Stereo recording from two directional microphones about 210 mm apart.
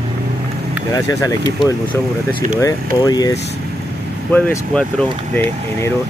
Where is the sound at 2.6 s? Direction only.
20° left (ahead or behind).